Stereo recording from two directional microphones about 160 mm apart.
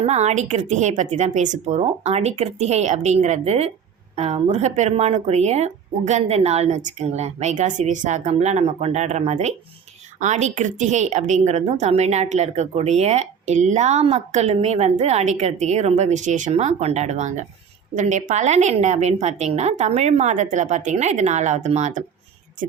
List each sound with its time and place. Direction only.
0.0 s a woman's voice: 45° right (ahead or behind)